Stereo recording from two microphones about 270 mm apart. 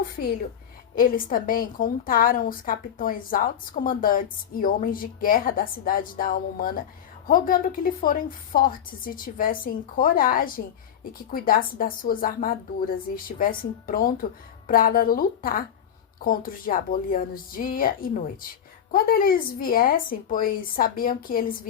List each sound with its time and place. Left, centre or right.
0.9 s a woman's voice: left